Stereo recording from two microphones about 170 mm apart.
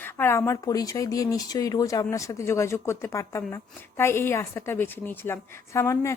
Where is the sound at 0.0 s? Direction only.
15° left (ahead or behind).